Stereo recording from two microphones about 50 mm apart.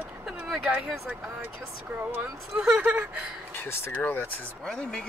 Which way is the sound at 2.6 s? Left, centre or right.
Right.